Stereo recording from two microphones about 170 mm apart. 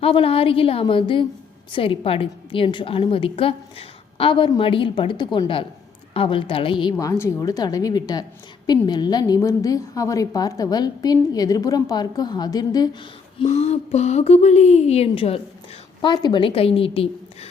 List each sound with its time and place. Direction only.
0.0 s a woman's voice: 35° left (ahead or behind)
7.0 s a woman's voice: 20° left (ahead or behind)
13.4 s a woman's voice: 40° left (ahead or behind)